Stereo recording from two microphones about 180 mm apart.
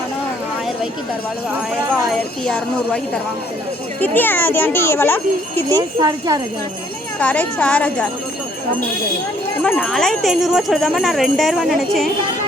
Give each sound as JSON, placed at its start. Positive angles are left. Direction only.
{"t": 2.0, "sound": "speech", "side_deg": 5}
{"t": 4.0, "sound": "a child's voice", "side_deg": 10}
{"t": 5.7, "sound": "speech", "side_deg": -20}
{"t": 7.2, "sound": "a child's voice", "side_deg": 5}
{"t": 9.6, "sound": "speech", "side_deg": 5}